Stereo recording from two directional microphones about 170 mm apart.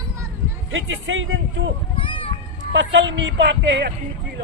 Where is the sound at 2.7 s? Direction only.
90° right.